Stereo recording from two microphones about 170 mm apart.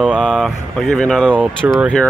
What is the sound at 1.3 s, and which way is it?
Speech, 10° right (ahead or behind).